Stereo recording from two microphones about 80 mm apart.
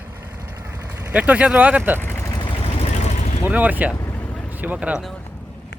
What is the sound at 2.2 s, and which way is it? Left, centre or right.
Vehicle, left.